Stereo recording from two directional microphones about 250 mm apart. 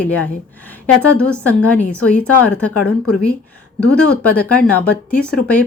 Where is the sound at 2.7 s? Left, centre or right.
Left.